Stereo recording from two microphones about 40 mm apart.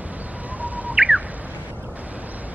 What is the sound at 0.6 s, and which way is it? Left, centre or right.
Bird, right.